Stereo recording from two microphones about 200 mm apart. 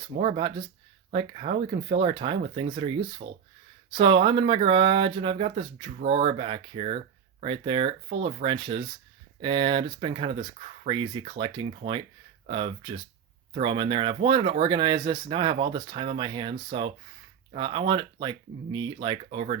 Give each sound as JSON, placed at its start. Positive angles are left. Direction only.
{"t": 0.2, "sound": "speech", "side_deg": -30}